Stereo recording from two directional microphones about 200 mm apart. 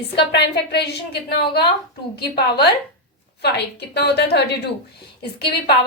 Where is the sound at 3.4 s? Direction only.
55° left (ahead or behind).